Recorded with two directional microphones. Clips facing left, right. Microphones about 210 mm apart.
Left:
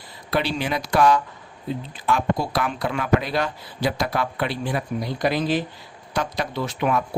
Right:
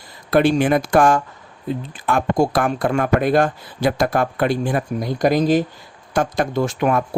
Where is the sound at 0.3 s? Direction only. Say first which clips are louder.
Right 9 dB; 50° right (ahead or behind).